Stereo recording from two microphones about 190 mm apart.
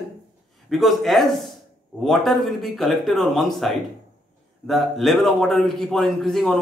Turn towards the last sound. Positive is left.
turn(degrees=0)  # may be behind; listen again after turning